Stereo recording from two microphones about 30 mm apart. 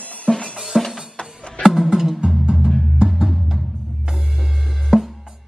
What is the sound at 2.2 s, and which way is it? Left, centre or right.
Music, right.